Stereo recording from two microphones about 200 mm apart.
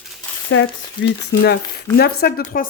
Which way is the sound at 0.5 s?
75° left (ahead or behind).